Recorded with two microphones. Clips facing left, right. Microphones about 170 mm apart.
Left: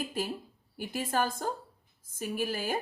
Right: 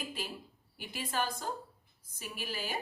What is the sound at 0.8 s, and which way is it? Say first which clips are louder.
A woman's voice: left 6 dB; 45° left (ahead or behind).